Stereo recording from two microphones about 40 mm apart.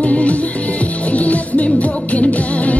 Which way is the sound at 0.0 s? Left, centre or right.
Left.